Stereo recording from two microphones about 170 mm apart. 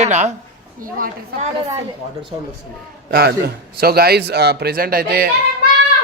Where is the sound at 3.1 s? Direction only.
70° right (ahead or behind).